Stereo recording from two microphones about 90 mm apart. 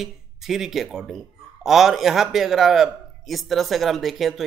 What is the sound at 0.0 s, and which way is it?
A man's voice, 5° right (ahead or behind).